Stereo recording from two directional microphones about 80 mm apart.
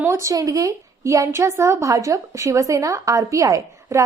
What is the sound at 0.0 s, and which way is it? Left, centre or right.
A woman's voice, right.